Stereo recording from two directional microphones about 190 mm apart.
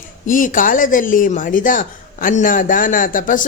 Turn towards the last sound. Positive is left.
turn(degrees=45)  # may be behind; listen again after turning